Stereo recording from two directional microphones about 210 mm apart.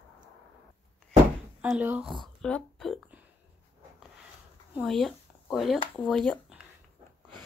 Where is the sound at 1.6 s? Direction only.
5° right (ahead or behind).